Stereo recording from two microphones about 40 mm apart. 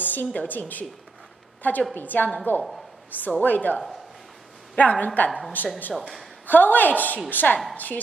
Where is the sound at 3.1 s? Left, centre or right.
Left.